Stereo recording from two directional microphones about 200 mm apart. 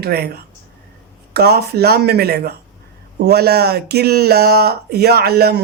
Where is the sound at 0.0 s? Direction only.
50° right (ahead or behind).